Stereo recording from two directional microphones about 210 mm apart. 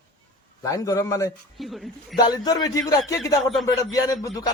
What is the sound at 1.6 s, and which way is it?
Speech, centre (ahead or behind).